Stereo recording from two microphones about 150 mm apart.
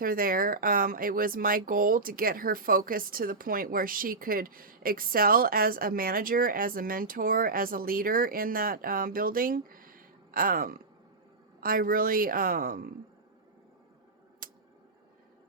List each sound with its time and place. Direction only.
0.0 s speech: 70° right (ahead or behind)